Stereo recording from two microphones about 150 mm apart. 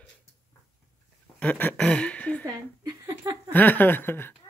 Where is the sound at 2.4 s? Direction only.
25° right (ahead or behind).